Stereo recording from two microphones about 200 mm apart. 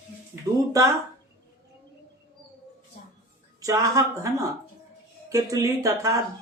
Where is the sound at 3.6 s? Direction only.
15° right (ahead or behind).